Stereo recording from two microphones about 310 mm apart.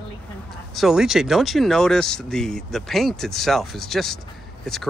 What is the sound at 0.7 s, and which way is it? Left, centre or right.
Speech, centre.